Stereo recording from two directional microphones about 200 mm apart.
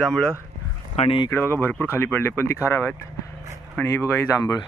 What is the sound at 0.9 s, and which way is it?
Speech, 25° left (ahead or behind).